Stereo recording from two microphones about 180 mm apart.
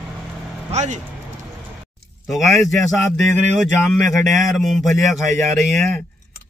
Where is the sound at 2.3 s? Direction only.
Centre (ahead or behind).